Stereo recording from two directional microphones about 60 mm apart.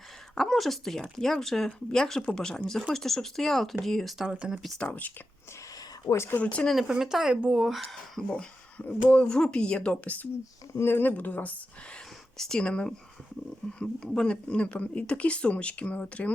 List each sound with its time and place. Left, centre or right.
0.3 s speech: centre
4.3 s speech: centre
4.8 s speech: left
6.1 s speech: left
6.3 s speech: left
6.7 s speech: centre
8.8 s speech: left
9.2 s speech: centre
10.8 s speech: left
11.2 s speech: left
12.4 s speech: centre